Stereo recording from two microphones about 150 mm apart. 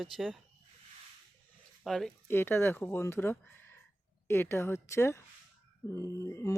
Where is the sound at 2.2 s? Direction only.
15° left (ahead or behind).